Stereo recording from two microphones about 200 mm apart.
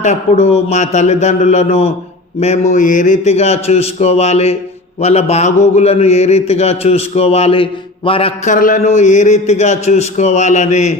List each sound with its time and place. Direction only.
0.0 s a man's voice: 30° left (ahead or behind)
8.5 s a man's voice: 40° left (ahead or behind)